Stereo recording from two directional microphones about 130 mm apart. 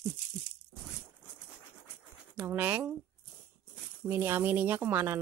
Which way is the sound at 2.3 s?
15° right (ahead or behind).